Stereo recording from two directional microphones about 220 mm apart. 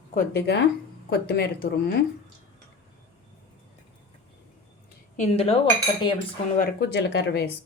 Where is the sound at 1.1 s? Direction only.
45° left (ahead or behind).